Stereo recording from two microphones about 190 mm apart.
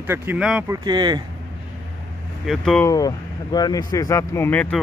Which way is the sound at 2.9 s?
20° left (ahead or behind).